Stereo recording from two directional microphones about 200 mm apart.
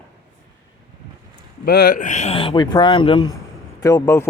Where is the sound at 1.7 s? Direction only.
50° left (ahead or behind); by 3.3 s 25° left (ahead or behind).